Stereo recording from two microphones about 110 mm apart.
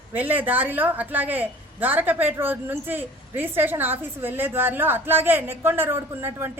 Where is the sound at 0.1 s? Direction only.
15° right (ahead or behind).